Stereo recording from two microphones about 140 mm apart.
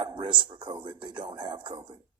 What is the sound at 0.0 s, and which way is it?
Speech, 35° right (ahead or behind).